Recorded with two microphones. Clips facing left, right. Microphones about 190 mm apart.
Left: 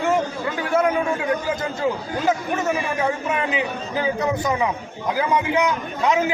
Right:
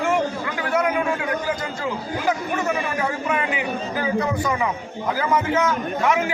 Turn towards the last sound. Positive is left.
turn(degrees=15)  # may be behind; listen again after turning